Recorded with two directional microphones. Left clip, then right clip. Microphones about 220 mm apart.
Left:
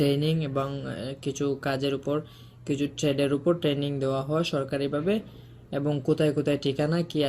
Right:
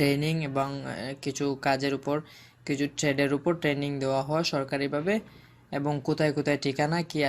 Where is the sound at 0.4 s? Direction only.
30° right (ahead or behind).